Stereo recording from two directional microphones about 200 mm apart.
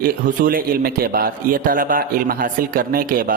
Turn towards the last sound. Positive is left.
turn(degrees=-45)  # may be behind; listen again after turning